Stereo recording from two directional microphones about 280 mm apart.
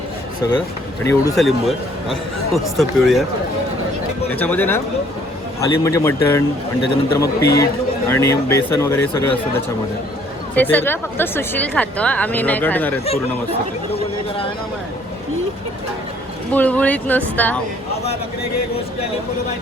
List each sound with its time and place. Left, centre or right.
1.0 s speech: centre
4.3 s speech: centre
10.5 s speech: centre
13.9 s speech: centre
16.5 s speech: centre